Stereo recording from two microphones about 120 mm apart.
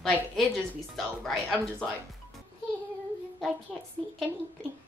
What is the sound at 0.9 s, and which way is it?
Speech, centre (ahead or behind).